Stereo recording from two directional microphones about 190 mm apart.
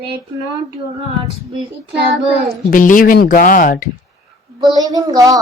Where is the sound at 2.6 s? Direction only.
45° left (ahead or behind).